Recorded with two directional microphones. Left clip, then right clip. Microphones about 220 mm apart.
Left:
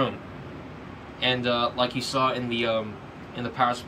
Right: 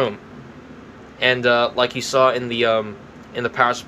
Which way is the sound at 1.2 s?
15° right (ahead or behind).